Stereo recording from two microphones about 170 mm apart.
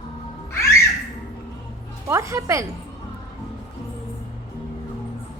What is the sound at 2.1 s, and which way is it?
Speech, 15° right (ahead or behind).